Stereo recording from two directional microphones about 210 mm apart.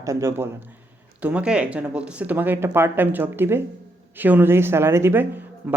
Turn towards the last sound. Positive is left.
turn(degrees=-10)  # may be behind; listen again after turning